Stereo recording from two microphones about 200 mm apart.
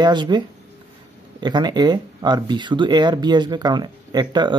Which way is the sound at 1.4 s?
20° right (ahead or behind).